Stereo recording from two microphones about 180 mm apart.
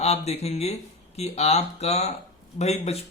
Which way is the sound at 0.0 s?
35° left (ahead or behind).